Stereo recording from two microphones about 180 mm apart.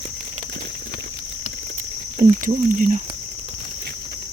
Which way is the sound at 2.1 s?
45° right (ahead or behind).